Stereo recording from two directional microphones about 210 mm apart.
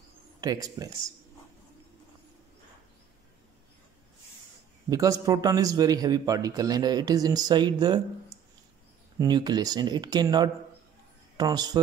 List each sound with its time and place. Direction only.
0.4 s a man's voice: 20° right (ahead or behind)
4.8 s a man's voice: 15° right (ahead or behind)
9.2 s speech: 20° right (ahead or behind)